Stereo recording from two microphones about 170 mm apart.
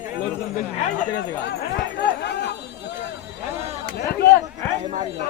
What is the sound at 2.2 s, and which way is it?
Speech, 85° left.